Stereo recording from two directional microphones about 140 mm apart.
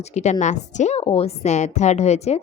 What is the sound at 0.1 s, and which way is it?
A woman's voice, 55° left (ahead or behind).